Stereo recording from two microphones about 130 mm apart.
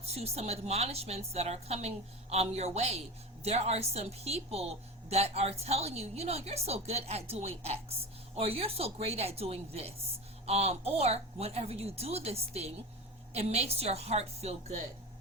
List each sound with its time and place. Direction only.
0.1 s a woman's voice: 55° right (ahead or behind)